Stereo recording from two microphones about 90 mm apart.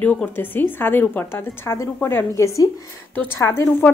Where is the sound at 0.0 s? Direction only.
20° left (ahead or behind).